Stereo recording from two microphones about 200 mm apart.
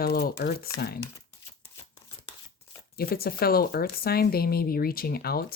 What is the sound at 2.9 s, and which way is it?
Speech, 50° left (ahead or behind).